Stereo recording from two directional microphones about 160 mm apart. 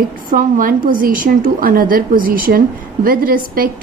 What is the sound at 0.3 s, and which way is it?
A woman's voice, 55° right (ahead or behind).